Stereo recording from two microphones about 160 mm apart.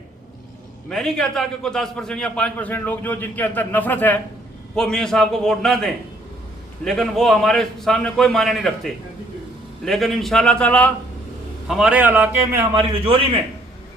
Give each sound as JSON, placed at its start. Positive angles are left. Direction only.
{"t": 0.9, "sound": "a man's voice", "side_deg": 5}
{"t": 11.7, "sound": "a man's voice", "side_deg": -5}
{"t": 12.7, "sound": "a man's voice", "side_deg": -35}